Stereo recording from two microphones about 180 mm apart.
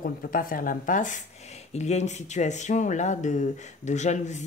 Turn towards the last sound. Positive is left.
turn(degrees=40)  # may be behind; listen again after turning